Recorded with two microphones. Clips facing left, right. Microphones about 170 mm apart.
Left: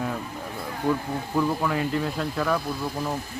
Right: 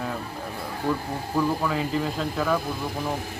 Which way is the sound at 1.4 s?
Centre (ahead or behind).